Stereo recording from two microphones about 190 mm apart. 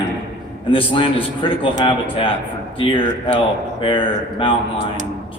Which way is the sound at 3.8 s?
25° left (ahead or behind).